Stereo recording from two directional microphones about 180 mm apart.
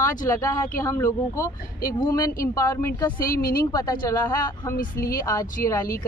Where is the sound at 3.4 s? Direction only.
55° left (ahead or behind).